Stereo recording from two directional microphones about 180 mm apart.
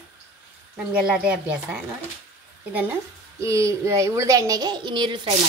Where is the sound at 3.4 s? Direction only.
15° right (ahead or behind).